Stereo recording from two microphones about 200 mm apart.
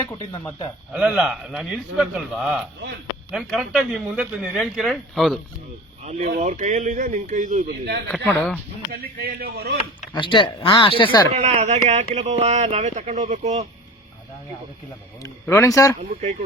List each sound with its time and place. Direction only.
0.9 s speech: 5° right (ahead or behind)
6.1 s speech: 40° right (ahead or behind)
8.0 s speech: 10° left (ahead or behind)
8.9 s speech: 50° right (ahead or behind)
10.1 s speech: 25° left (ahead or behind)
11.3 s speech: 30° right (ahead or behind)
15.2 s speech: 15° left (ahead or behind)